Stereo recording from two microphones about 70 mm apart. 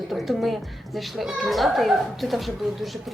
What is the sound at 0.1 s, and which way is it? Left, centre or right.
Speech, centre.